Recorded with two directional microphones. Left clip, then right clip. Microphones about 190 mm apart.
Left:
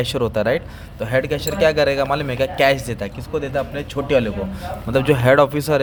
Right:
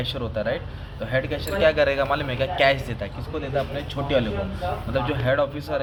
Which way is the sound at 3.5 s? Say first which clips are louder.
Left 4 dB; 50° left (ahead or behind).